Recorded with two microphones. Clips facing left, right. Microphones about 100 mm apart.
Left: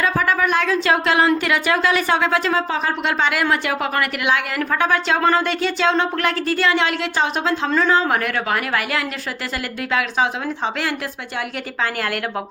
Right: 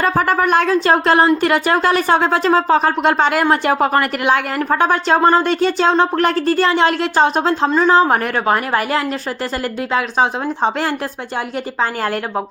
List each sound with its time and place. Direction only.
0.0 s a woman's voice: 45° right (ahead or behind)
7.7 s speech: 20° right (ahead or behind)
7.9 s a woman's voice: 35° right (ahead or behind)